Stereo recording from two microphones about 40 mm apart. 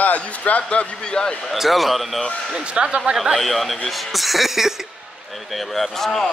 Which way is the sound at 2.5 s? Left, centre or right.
Right.